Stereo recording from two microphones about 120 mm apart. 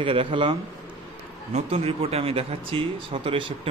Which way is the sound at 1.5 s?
55° right (ahead or behind).